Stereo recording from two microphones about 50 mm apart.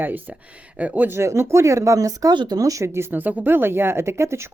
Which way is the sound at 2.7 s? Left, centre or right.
Right.